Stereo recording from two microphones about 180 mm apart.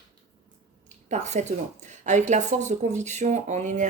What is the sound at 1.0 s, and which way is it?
A woman's voice, 40° right (ahead or behind).